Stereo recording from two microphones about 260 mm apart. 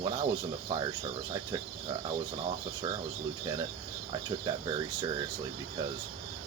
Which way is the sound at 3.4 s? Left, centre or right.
Centre.